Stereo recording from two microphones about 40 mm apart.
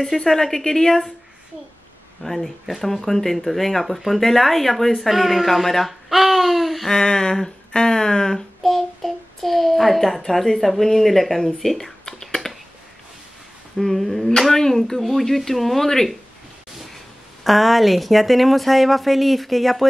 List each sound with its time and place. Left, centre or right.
0.0 s speech: centre
2.2 s speech: centre
6.9 s speech: centre
8.6 s speech: centre
13.7 s speech: centre